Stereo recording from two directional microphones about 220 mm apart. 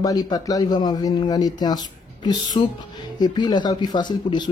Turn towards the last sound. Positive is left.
turn(degrees=20)  # may be behind; listen again after turning